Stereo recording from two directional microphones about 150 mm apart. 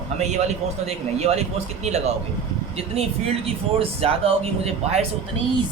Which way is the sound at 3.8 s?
40° right (ahead or behind).